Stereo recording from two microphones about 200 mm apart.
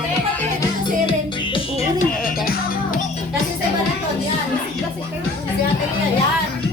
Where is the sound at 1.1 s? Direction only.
25° left (ahead or behind).